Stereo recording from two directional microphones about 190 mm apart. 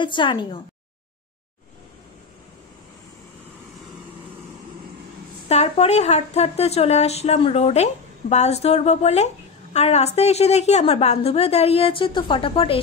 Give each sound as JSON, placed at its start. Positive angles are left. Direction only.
{"t": 0.0, "sound": "a woman's voice", "side_deg": 25}
{"t": 5.5, "sound": "a woman's voice", "side_deg": 35}